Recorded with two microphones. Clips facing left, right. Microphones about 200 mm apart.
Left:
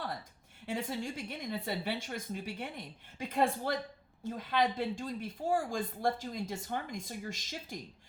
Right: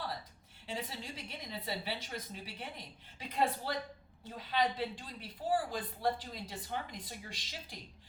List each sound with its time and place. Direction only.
0.7 s a woman's voice: 50° left (ahead or behind)